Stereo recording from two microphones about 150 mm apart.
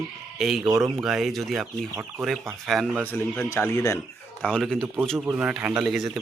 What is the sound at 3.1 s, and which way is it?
Speech, 15° left (ahead or behind).